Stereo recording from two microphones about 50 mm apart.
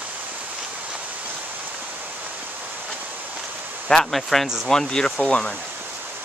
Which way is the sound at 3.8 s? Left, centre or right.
Centre.